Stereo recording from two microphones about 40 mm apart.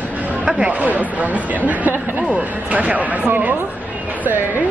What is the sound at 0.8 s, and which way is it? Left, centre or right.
Speech, right.